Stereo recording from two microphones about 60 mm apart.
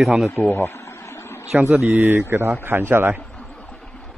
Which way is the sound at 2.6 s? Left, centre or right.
Right.